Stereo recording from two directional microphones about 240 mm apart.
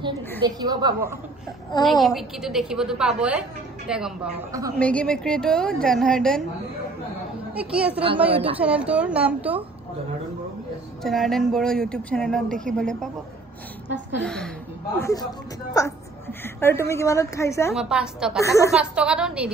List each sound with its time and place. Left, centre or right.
0.4 s a woman's voice: centre
1.9 s a woman's voice: centre
4.5 s a woman's voice: centre
4.7 s a woman's voice: centre
7.5 s a woman's voice: centre
8.3 s a woman's voice: right
8.5 s a woman's voice: centre
11.0 s a woman's voice: centre
14.2 s a woman's voice: centre
17.7 s a woman's voice: centre
18.4 s a woman's voice: centre
18.7 s a woman's voice: centre